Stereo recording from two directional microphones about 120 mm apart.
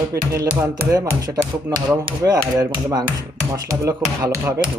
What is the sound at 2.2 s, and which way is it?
Speech, 30° right (ahead or behind).